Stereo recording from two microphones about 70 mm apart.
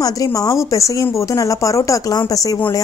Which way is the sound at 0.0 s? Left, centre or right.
Left.